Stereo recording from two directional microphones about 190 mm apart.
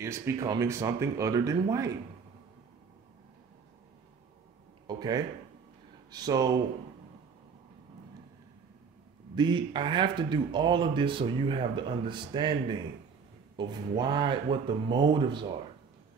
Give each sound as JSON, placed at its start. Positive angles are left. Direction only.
{"t": 0.0, "sound": "speech", "side_deg": -15}
{"t": 4.8, "sound": "speech", "side_deg": -20}
{"t": 9.3, "sound": "speech", "side_deg": -25}